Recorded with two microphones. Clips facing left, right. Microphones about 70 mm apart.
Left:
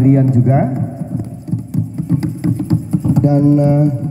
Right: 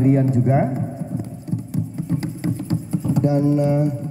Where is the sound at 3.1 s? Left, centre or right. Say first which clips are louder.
Left 6 dB; left.